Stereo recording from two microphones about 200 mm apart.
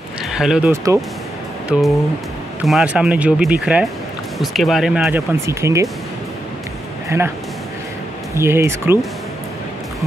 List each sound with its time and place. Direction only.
0.3 s speech: centre (ahead or behind)
0.9 s speech: 15° right (ahead or behind)
1.7 s speech: 5° right (ahead or behind)
7.1 s speech: 15° right (ahead or behind)
8.4 s speech: 15° right (ahead or behind)